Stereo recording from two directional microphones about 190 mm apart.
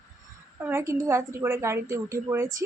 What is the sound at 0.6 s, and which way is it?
A woman's voice, 15° right (ahead or behind).